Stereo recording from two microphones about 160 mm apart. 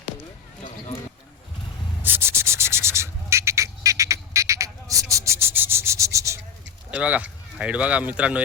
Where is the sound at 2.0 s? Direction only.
15° right (ahead or behind).